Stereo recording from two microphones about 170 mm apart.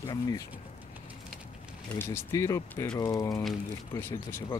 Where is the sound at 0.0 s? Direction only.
25° left (ahead or behind).